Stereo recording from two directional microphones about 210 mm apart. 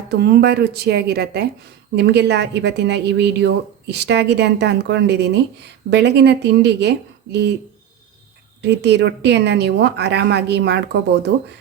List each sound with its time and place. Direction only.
0.1 s a woman's voice: 50° right (ahead or behind)
8.6 s a woman's voice: 55° right (ahead or behind)